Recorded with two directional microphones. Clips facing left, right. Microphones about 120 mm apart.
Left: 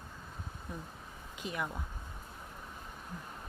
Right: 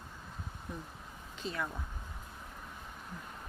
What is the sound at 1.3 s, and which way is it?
Speech, 15° left (ahead or behind).